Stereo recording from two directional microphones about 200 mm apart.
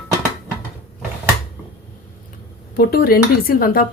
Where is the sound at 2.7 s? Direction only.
50° left (ahead or behind).